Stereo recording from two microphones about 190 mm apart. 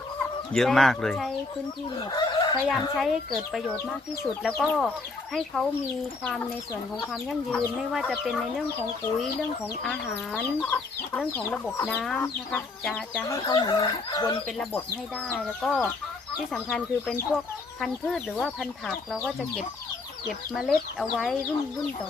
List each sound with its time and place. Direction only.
0.2 s speech: centre (ahead or behind)
2.1 s chicken: 25° left (ahead or behind)
2.6 s speech: centre (ahead or behind)
6.2 s speech: 5° left (ahead or behind)
9.9 s speech: 10° left (ahead or behind)
13.2 s speech: 20° left (ahead or behind)
15.3 s speech: centre (ahead or behind)
20.5 s speech: centre (ahead or behind)